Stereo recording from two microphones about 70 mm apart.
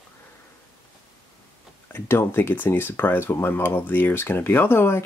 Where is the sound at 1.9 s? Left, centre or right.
Left.